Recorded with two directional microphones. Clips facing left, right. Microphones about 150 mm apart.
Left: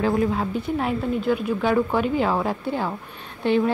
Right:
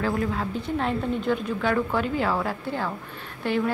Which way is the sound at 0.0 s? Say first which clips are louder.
Left 4 dB; 20° left (ahead or behind).